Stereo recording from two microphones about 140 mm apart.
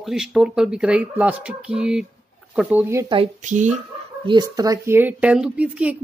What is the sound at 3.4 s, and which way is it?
Speech, 60° right (ahead or behind).